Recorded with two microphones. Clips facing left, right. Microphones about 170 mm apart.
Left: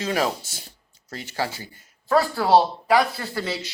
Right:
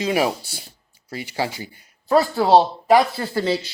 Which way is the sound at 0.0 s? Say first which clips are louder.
Right 3 dB; 15° right (ahead or behind).